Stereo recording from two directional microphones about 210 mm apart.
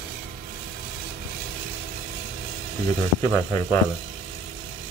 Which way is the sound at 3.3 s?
10° left (ahead or behind).